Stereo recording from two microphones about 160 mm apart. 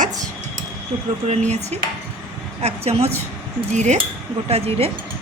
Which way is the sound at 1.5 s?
45° right (ahead or behind).